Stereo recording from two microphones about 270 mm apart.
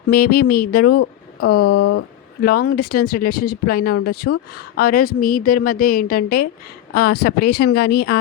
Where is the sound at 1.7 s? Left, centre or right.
Left.